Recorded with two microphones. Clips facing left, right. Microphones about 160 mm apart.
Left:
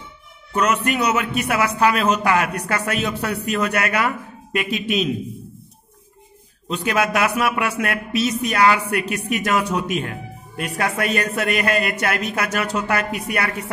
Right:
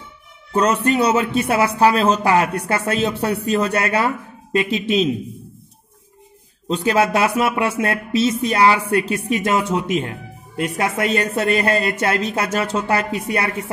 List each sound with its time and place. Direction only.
0.5 s speech: 30° right (ahead or behind)
6.7 s speech: 30° right (ahead or behind)